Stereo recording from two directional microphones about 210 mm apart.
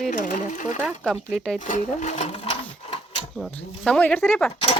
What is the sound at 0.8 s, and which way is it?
Speech, 5° right (ahead or behind).